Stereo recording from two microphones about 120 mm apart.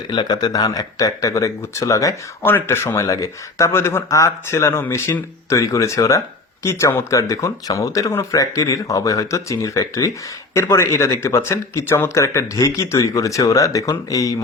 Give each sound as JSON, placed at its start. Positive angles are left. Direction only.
{"t": 0.1, "sound": "speech", "side_deg": 35}